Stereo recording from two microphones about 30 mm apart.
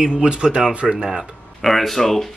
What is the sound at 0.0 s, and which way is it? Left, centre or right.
Speech, right.